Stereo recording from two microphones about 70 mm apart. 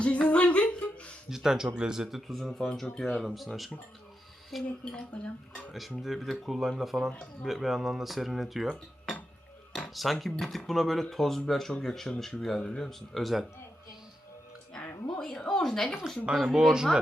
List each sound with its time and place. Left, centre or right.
0.0 s humming: centre
1.3 s speech: centre
4.9 s speech: centre
6.0 s speech: centre
9.9 s speech: centre
12.9 s speech: centre
15.2 s a woman's voice: centre